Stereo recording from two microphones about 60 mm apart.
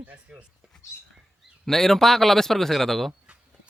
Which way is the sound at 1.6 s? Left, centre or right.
Centre.